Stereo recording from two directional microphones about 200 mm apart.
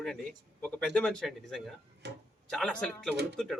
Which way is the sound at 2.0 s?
60° right (ahead or behind).